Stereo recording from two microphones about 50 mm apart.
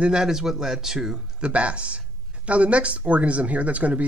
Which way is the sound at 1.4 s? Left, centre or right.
Right.